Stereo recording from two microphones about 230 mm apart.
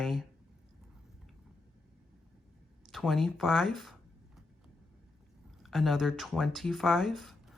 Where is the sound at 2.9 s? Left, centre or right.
Centre.